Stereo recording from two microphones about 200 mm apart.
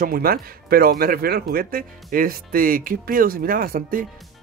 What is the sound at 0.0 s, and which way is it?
Speech, 50° right (ahead or behind).